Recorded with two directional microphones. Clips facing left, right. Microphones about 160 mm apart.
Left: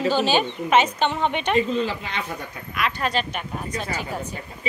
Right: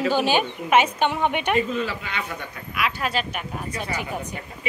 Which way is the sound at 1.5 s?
30° left (ahead or behind).